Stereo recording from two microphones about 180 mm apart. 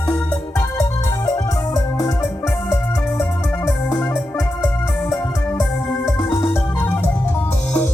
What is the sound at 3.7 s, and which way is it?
Music, 10° left (ahead or behind).